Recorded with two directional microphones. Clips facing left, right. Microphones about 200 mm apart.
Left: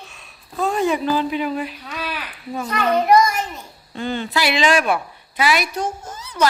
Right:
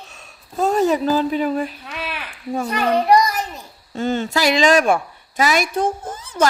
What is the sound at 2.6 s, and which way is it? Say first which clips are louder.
A child's voice: even; 30° right (ahead or behind).